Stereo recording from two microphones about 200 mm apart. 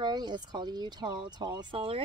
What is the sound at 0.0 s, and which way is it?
Speech, 20° right (ahead or behind).